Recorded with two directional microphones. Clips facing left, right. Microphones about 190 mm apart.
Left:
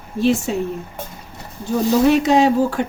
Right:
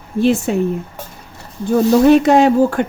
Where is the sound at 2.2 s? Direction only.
55° right (ahead or behind).